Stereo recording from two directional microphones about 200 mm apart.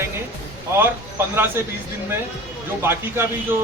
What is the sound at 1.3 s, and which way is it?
Speech, 10° right (ahead or behind).